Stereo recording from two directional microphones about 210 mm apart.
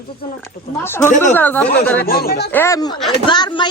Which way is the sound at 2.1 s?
45° left (ahead or behind).